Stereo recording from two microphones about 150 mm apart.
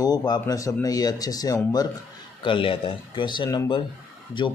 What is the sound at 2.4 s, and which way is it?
Speech, 35° left (ahead or behind).